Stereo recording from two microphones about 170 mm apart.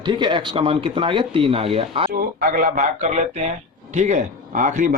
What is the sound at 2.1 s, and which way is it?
Speech, 55° right (ahead or behind).